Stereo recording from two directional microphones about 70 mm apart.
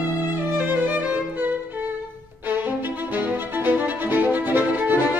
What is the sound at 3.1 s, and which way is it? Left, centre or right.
Music, right.